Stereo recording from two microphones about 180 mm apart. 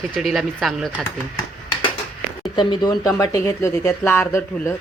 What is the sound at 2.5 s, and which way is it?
Speech, 25° left (ahead or behind).